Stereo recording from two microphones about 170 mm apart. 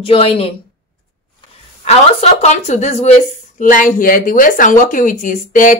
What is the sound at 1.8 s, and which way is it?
Speech, 40° left (ahead or behind).